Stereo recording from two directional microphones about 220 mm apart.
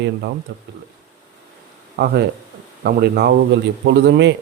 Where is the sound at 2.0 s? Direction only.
45° right (ahead or behind).